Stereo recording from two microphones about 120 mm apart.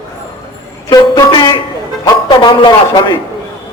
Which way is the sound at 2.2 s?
40° left (ahead or behind).